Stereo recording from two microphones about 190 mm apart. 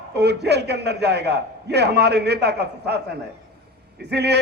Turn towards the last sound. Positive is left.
turn(degrees=-60)  # may be behind; listen again after turning